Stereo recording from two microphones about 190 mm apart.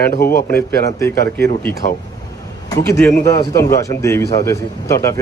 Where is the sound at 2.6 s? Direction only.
20° left (ahead or behind).